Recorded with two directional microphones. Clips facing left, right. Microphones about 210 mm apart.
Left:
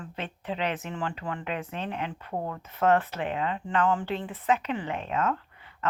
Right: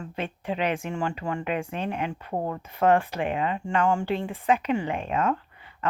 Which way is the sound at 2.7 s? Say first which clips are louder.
Right 2 dB; 15° right (ahead or behind).